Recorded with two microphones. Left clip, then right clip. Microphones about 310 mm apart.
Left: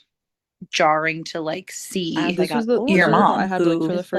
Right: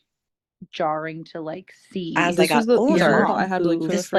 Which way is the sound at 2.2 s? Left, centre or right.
Right.